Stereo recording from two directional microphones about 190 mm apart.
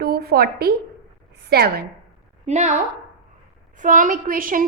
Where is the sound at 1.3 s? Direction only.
55° right (ahead or behind).